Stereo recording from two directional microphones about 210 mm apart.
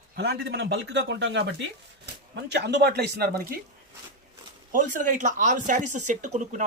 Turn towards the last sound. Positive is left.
turn(degrees=-35)  # may be behind; listen again after turning